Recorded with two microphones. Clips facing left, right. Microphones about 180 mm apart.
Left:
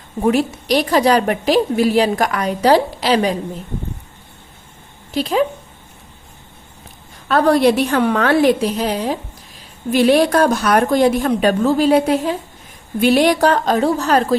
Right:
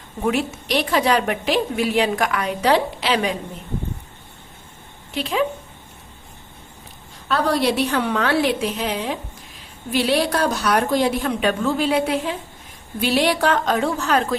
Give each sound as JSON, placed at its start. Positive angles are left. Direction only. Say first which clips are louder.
{"t": 0.2, "sound": "a woman's voice", "louder": "left 5 dB", "side_deg": 40}
{"t": 5.1, "sound": "a woman's voice", "louder": "left 5 dB", "side_deg": 40}
{"t": 7.3, "sound": "a woman's voice", "louder": "left 7 dB", "side_deg": 50}
{"t": 9.9, "sound": "a woman's voice", "louder": "left 7 dB", "side_deg": 50}